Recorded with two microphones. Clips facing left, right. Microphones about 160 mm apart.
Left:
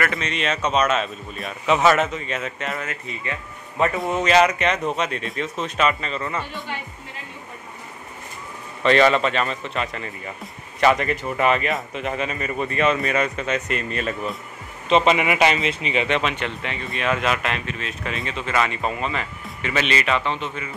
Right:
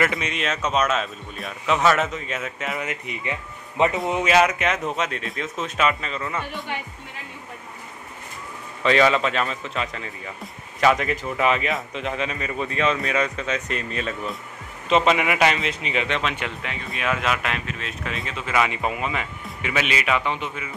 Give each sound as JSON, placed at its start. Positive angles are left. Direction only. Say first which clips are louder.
{"t": 0.2, "sound": "a man's voice", "louder": "left 2 dB", "side_deg": -5}
{"t": 2.8, "sound": "speech", "louder": "right 1 dB", "side_deg": -15}
{"t": 4.1, "sound": "a man's voice", "louder": "left 1 dB", "side_deg": -5}
{"t": 8.8, "sound": "a man's voice", "louder": "left 2 dB", "side_deg": 0}